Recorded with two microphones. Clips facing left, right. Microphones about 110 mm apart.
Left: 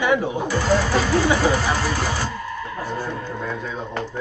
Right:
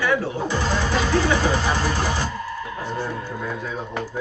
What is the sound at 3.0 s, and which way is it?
Speech, 10° right (ahead or behind).